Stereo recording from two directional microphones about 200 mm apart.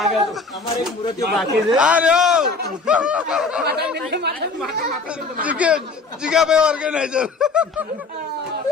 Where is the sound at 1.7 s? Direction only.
5° right (ahead or behind).